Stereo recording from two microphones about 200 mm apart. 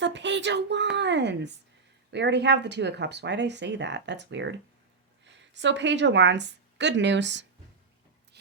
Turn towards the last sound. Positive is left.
turn(degrees=-60)  # may be behind; listen again after turning